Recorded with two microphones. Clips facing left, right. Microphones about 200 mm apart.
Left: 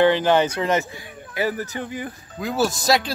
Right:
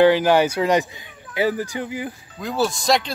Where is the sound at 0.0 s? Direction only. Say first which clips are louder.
Right 2 dB; 10° right (ahead or behind).